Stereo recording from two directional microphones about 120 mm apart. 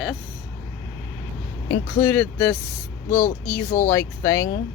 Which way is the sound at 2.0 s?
15° left (ahead or behind).